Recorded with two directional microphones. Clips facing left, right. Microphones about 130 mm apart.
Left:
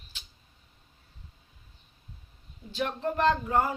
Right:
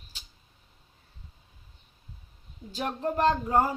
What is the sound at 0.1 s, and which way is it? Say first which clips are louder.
Tick-tock: left 1 dB; 40° right (ahead or behind).